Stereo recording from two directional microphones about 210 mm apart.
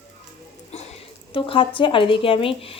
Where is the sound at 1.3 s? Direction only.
25° left (ahead or behind).